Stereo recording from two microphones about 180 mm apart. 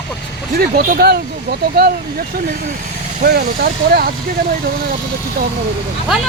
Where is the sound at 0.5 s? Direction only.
60° right (ahead or behind).